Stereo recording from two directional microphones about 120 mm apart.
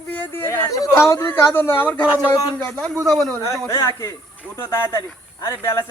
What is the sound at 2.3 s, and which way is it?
Speech, 35° left (ahead or behind).